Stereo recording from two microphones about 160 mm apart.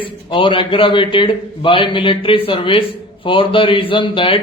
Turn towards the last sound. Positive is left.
turn(degrees=35)  # may be behind; listen again after turning